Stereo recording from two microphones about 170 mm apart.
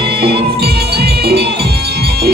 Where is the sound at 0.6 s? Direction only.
65° right (ahead or behind).